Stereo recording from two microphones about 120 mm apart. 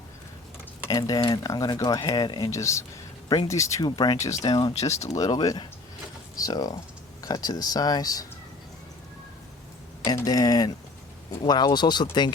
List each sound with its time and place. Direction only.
0.9 s speech: 30° left (ahead or behind)
4.7 s speech: 65° left (ahead or behind)
5.0 s speech: 30° left (ahead or behind)
10.2 s speech: 30° left (ahead or behind)